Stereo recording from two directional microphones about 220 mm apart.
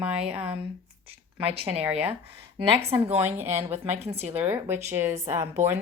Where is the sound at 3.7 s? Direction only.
30° right (ahead or behind).